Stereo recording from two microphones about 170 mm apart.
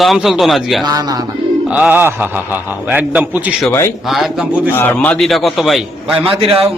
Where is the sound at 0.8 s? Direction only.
20° right (ahead or behind).